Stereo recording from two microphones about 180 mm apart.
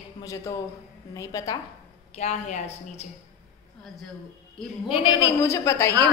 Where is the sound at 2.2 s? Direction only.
40° left (ahead or behind).